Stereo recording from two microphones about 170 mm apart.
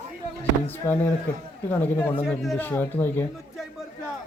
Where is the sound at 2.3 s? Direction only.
Centre (ahead or behind).